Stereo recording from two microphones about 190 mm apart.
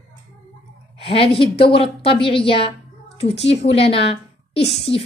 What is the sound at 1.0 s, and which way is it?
A woman's voice, 30° left (ahead or behind).